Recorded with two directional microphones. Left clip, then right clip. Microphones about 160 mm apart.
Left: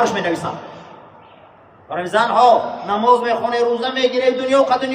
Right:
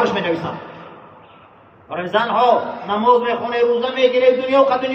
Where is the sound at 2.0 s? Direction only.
35° left (ahead or behind).